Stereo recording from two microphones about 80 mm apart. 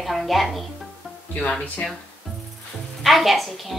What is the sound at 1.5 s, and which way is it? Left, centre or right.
Speech, centre.